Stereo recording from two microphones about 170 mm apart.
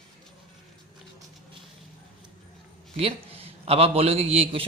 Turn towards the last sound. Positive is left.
turn(degrees=-35)  # may be behind; listen again after turning